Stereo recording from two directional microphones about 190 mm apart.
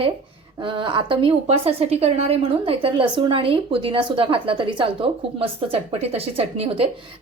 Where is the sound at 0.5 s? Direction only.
25° right (ahead or behind).